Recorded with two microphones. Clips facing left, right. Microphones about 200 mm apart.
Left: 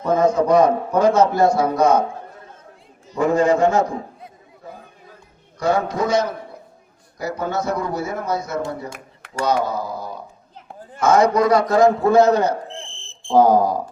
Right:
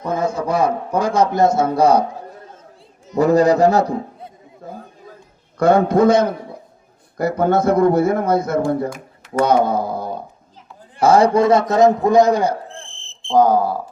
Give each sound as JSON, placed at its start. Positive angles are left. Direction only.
{"t": 0.2, "sound": "a man's voice", "side_deg": -10}
{"t": 3.2, "sound": "a man's voice", "side_deg": -40}
{"t": 5.5, "sound": "a man's voice", "side_deg": -55}
{"t": 11.0, "sound": "a man's voice", "side_deg": -30}
{"t": 12.9, "sound": "a sound", "side_deg": -20}
{"t": 13.3, "sound": "cricket", "side_deg": 10}